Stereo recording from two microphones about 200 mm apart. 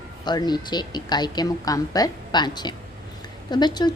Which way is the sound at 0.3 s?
20° left (ahead or behind).